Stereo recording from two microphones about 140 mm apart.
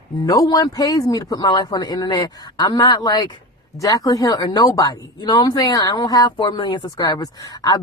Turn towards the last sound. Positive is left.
turn(degrees=25)  # may be behind; listen again after turning